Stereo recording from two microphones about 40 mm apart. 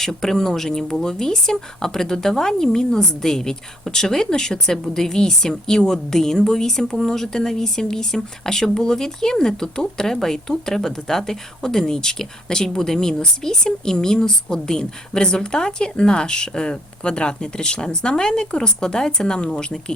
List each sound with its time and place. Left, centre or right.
0.0 s a woman's voice: centre